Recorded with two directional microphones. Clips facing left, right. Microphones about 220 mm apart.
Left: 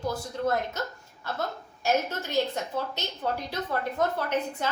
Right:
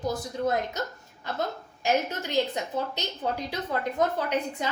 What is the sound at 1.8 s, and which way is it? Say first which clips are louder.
A woman's voice: even; 15° right (ahead or behind).